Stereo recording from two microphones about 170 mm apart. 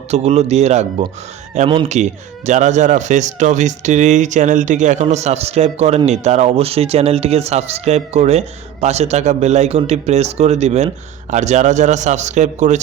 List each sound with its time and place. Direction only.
0.1 s a man's voice: 40° right (ahead or behind)